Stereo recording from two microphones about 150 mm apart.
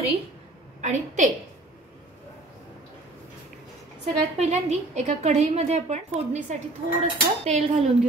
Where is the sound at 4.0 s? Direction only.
45° right (ahead or behind).